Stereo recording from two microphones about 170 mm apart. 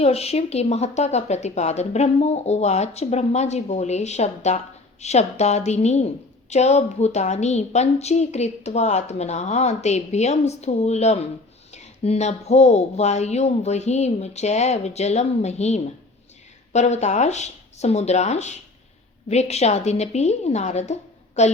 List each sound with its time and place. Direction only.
0.0 s speech: 35° left (ahead or behind)